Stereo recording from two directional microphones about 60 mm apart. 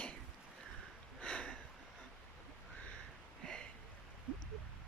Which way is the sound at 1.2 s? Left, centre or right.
Centre.